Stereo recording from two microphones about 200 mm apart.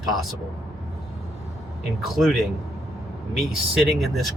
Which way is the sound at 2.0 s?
Centre (ahead or behind).